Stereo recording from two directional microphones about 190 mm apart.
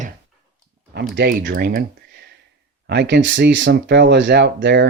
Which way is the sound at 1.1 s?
50° right (ahead or behind).